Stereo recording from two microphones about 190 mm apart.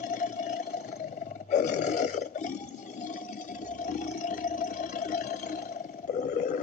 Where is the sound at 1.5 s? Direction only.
40° left (ahead or behind).